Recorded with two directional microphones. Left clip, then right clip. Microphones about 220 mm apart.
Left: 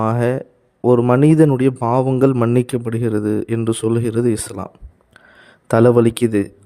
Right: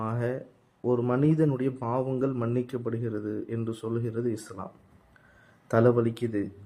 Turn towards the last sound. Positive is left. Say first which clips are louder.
# left 13 dB
turn(degrees=50)  # may be behind; listen again after turning